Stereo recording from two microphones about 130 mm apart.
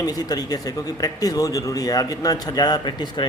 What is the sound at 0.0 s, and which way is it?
A man's voice, 30° left (ahead or behind).